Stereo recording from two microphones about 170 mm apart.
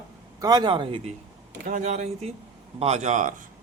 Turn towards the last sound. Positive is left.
turn(degrees=-45)  # may be behind; listen again after turning